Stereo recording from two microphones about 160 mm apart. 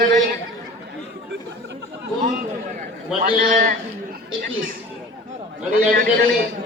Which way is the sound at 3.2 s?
60° right (ahead or behind).